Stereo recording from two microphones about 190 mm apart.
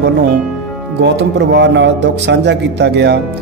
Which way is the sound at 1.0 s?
65° right (ahead or behind).